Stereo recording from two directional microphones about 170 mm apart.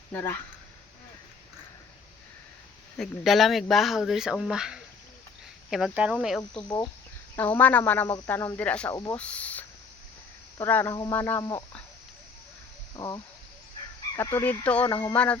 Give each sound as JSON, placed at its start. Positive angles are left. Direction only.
{"t": 0.1, "sound": "speech", "side_deg": 10}
{"t": 3.0, "sound": "speech", "side_deg": 0}
{"t": 6.5, "sound": "speech", "side_deg": 25}
{"t": 7.3, "sound": "speech", "side_deg": 10}
{"t": 8.9, "sound": "speech", "side_deg": 20}
{"t": 9.1, "sound": "speech", "side_deg": 10}
{"t": 13.0, "sound": "speech", "side_deg": 25}
{"t": 14.4, "sound": "speech", "side_deg": 10}
{"t": 14.8, "sound": "speech", "side_deg": 20}
{"t": 15.1, "sound": "speech", "side_deg": 10}